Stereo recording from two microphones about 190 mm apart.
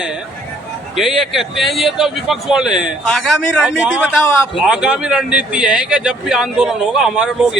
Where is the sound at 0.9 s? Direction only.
Centre (ahead or behind).